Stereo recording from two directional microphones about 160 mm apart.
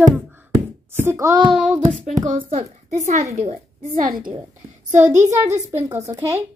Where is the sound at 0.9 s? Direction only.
20° right (ahead or behind).